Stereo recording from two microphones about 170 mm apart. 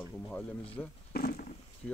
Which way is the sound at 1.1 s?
65° left (ahead or behind).